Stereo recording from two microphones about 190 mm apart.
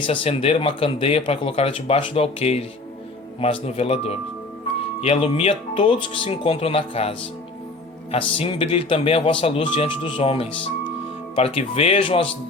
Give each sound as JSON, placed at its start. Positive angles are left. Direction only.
{"t": 0.0, "sound": "speech", "side_deg": 25}